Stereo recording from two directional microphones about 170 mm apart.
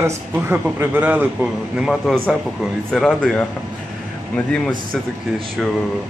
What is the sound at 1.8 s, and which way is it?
Speech, centre (ahead or behind).